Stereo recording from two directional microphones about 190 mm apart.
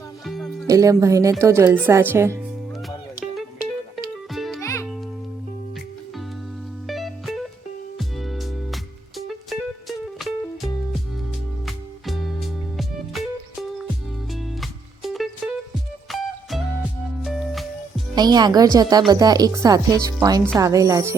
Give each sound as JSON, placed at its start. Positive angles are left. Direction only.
{"t": 0.3, "sound": "music", "side_deg": 0}
{"t": 0.7, "sound": "a woman's voice", "side_deg": -15}
{"t": 3.9, "sound": "music", "side_deg": 0}
{"t": 4.6, "sound": "music", "side_deg": 15}
{"t": 6.8, "sound": "music", "side_deg": 0}
{"t": 18.1, "sound": "a woman's voice", "side_deg": -20}